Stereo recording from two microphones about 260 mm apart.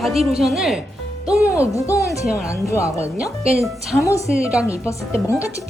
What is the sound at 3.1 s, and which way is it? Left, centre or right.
Speech, centre.